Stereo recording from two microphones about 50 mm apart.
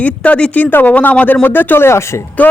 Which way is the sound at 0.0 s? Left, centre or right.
Left.